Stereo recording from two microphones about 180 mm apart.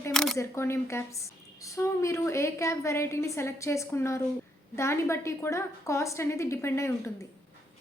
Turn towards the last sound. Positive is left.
turn(degrees=15)  # may be behind; listen again after turning